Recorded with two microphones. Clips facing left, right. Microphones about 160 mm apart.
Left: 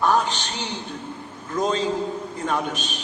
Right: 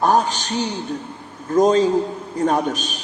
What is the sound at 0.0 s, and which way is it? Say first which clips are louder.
A man's voice: right 3 dB; 40° right (ahead or behind).